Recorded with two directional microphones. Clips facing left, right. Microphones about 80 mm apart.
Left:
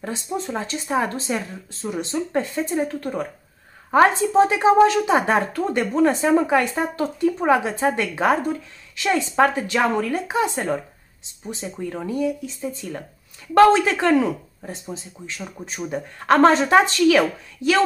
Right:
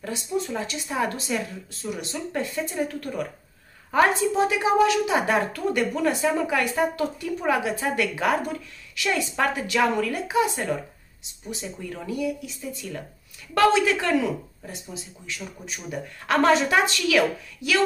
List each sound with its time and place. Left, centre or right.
0.0 s a woman's voice: left